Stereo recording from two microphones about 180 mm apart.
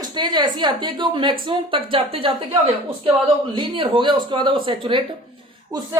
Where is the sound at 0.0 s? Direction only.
25° right (ahead or behind).